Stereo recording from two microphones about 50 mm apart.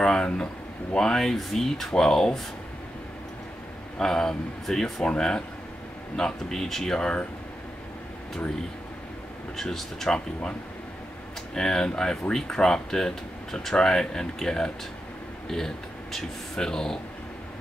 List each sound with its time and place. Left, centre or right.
0.0 s a sound: centre
0.9 s speech: centre
4.0 s speech: centre
5.0 s speech: centre
9.6 s speech: centre
10.0 s speech: centre
11.5 s speech: centre